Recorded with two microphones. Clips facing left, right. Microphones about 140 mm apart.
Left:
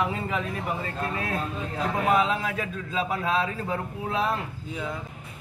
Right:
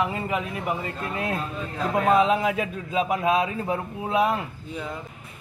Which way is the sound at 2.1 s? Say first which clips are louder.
Right 4 dB; 20° right (ahead or behind).